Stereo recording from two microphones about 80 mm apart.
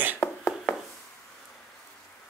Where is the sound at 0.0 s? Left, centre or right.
Right.